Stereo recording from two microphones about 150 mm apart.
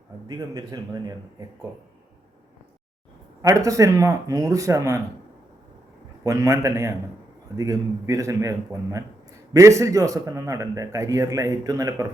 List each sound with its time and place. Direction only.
0.3 s a man's voice: 25° right (ahead or behind)
3.4 s a man's voice: 20° right (ahead or behind)
6.2 s a man's voice: 20° right (ahead or behind)